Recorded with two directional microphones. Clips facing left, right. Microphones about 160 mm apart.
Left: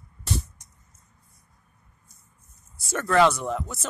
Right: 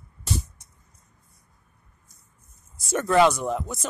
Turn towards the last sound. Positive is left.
turn(degrees=-15)  # may be behind; listen again after turning